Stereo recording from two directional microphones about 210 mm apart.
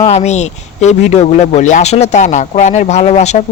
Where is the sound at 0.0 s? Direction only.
30° left (ahead or behind).